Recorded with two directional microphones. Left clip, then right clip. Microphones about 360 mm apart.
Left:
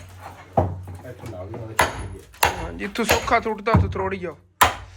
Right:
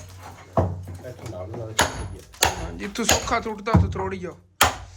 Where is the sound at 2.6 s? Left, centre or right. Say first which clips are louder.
Left 2 dB; centre.